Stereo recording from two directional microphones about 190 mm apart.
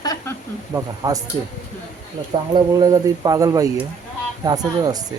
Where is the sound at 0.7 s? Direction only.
20° right (ahead or behind).